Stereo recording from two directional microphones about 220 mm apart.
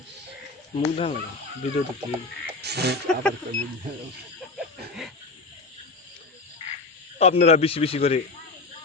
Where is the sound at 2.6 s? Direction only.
50° right (ahead or behind).